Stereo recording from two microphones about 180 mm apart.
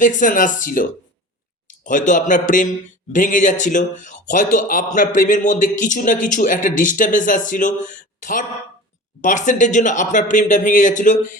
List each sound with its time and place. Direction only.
0.0 s speech: 45° left (ahead or behind)